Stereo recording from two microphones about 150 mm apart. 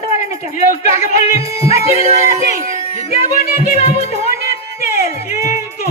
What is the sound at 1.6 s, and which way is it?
Music, 40° left (ahead or behind).